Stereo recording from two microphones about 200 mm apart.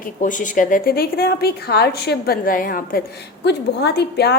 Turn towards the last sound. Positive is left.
turn(degrees=55)  # may be behind; listen again after turning